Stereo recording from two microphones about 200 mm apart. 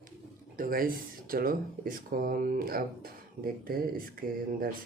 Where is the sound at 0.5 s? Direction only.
45° right (ahead or behind).